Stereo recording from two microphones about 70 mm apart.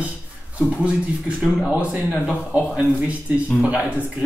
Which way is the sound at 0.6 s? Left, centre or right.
Centre.